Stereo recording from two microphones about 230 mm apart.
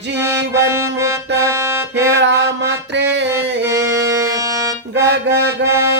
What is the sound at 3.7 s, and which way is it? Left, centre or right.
Music, centre.